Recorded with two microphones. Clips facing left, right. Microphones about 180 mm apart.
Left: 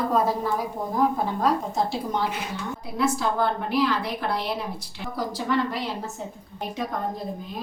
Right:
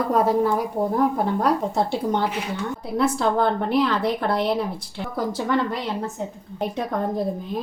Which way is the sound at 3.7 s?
55° right (ahead or behind).